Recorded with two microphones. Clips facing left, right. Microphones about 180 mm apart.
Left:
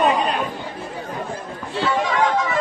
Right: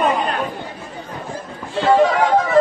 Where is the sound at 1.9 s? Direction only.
55° right (ahead or behind).